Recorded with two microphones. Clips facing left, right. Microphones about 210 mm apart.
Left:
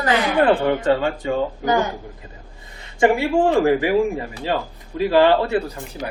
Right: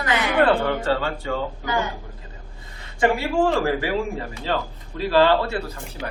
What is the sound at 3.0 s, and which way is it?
Speech, 20° left (ahead or behind).